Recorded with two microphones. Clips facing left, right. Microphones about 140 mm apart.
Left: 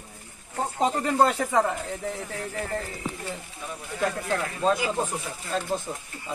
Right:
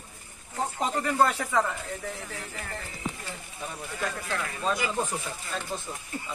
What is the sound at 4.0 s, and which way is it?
Speech, 35° left (ahead or behind).